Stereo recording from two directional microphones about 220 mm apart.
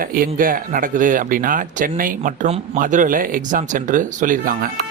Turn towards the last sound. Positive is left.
turn(degrees=-40)  # may be behind; listen again after turning